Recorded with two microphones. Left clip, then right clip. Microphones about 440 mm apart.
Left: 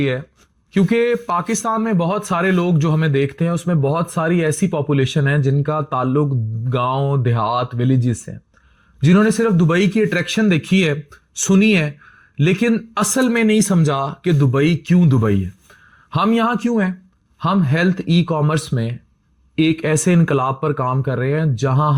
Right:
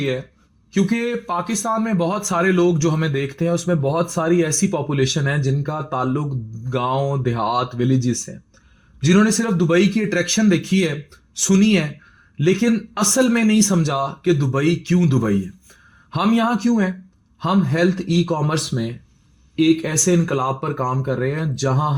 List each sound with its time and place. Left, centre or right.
0.7 s speech: left